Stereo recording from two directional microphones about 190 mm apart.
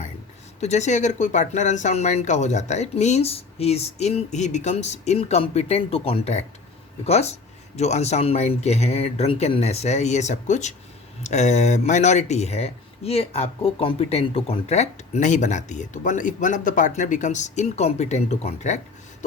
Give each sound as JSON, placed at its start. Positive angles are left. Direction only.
{"t": 0.6, "sound": "speech", "side_deg": 35}